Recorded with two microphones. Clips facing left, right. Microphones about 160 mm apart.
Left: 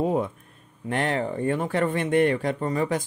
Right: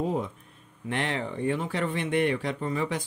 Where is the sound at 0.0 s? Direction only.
55° left (ahead or behind).